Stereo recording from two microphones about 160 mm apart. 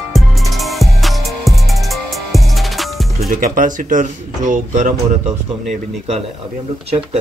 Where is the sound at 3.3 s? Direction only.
55° right (ahead or behind).